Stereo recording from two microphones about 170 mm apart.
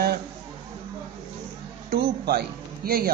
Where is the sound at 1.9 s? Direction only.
65° right (ahead or behind).